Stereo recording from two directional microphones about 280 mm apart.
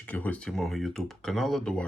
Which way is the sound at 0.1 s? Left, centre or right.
Centre.